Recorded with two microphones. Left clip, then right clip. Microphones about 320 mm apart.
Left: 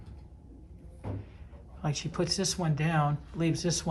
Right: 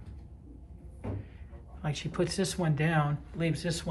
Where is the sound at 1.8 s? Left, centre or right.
Centre.